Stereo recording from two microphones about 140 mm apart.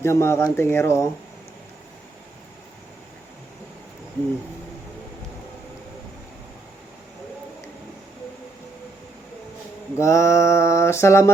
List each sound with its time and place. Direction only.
0.0 s mantra: 20° left (ahead or behind)
10.0 s mantra: 20° left (ahead or behind)